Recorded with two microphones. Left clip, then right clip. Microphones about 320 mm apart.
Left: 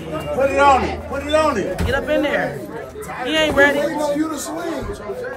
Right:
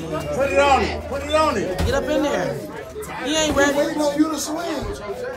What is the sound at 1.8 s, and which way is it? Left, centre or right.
Speech, centre.